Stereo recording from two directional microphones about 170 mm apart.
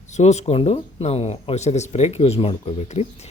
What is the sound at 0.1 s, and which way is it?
Speech, 40° left (ahead or behind).